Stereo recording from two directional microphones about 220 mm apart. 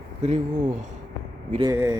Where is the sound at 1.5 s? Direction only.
15° right (ahead or behind).